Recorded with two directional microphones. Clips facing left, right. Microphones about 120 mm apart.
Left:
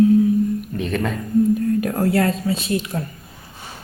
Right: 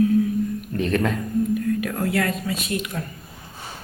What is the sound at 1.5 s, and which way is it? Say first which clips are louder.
Speech: left 4 dB; 35° left (ahead or behind).